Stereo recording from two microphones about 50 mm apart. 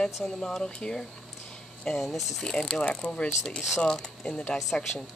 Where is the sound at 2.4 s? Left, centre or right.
Centre.